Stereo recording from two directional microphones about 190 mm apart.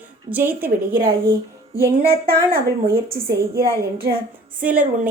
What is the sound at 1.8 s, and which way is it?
A woman's voice, 55° right (ahead or behind).